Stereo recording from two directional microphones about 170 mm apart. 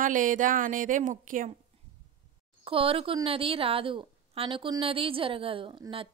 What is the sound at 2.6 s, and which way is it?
A woman's voice, 35° right (ahead or behind).